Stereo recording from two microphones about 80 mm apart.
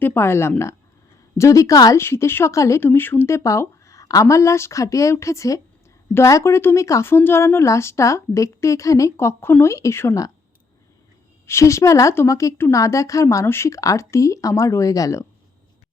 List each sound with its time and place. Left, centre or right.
0.0 s speech: left
1.4 s a woman's voice: left
2.0 s speech: left
2.8 s speech: left
11.4 s speech: left